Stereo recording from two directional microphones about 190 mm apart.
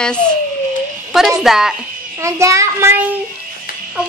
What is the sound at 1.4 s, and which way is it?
Speech, 5° right (ahead or behind).